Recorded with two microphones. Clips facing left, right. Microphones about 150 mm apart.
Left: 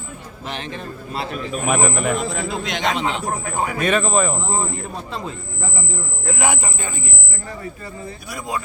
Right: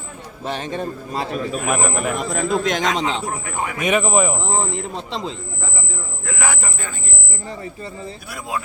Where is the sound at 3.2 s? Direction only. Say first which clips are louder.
Left 2 dB; 35° left (ahead or behind).